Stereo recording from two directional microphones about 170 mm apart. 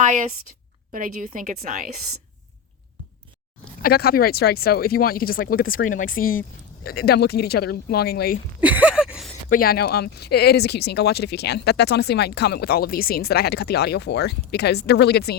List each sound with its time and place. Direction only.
0.0 s a woman's voice: 50° right (ahead or behind)
3.8 s speech: 65° left (ahead or behind)
6.8 s speech: 65° left (ahead or behind)
8.6 s a sound: 10° right (ahead or behind)
9.5 s speech: 60° left (ahead or behind)